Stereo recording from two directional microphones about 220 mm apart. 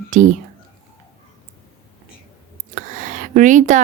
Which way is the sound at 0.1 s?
35° right (ahead or behind).